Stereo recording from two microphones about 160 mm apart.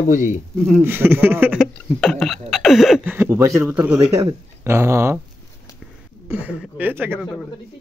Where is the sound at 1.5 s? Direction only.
Centre (ahead or behind).